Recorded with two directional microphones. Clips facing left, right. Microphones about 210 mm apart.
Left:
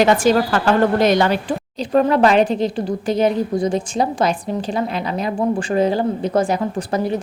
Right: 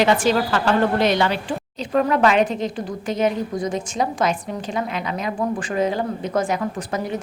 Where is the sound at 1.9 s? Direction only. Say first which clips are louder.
Left 3 dB; 35° left (ahead or behind).